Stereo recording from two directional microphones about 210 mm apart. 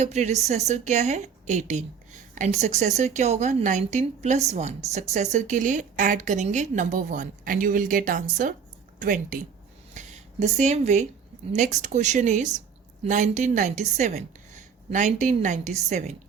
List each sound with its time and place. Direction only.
0.0 s a woman's voice: 30° right (ahead or behind)
9.9 s a sound: 35° right (ahead or behind)
11.5 s a woman's voice: 35° right (ahead or behind)